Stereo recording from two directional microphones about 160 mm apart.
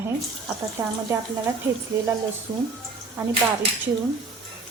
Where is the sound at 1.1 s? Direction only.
15° right (ahead or behind).